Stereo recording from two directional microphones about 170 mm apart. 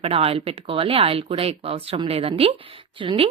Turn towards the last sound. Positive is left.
turn(degrees=-30)  # may be behind; listen again after turning